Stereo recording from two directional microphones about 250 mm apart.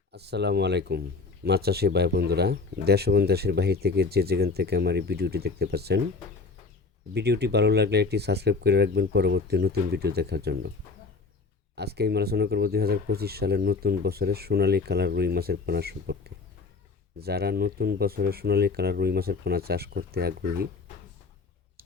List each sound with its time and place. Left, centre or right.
0.1 s speech: right
7.1 s speech: right
11.7 s speech: right